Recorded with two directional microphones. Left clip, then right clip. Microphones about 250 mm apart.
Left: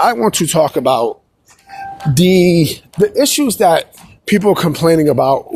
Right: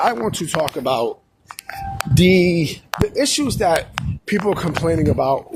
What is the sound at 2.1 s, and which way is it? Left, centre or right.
Speech, left.